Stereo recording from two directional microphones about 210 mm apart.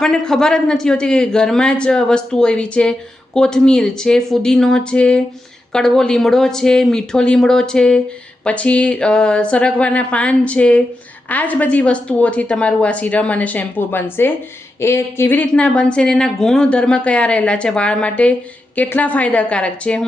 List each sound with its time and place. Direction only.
0.0 s a woman's voice: 5° left (ahead or behind)